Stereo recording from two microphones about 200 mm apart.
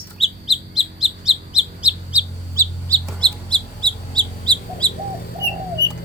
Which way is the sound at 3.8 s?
20° right (ahead or behind).